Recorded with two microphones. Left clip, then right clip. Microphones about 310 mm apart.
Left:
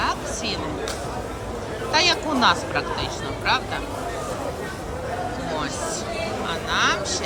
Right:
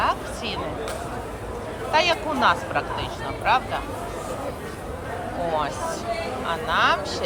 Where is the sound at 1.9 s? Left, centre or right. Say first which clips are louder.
Left 1 dB; centre.